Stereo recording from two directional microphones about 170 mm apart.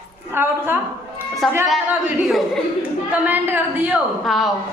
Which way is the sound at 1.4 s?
Centre (ahead or behind).